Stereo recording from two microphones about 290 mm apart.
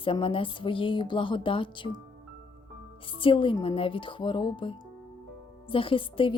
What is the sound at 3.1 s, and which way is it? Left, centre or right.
A woman's voice, centre.